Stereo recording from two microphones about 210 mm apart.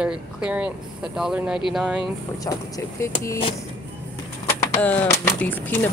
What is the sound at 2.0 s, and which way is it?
Speech, 15° left (ahead or behind).